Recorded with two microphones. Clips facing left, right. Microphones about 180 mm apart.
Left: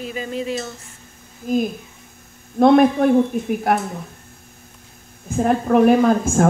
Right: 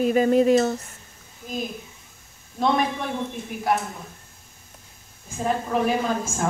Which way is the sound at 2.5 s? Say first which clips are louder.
Left 10 dB; 55° left (ahead or behind).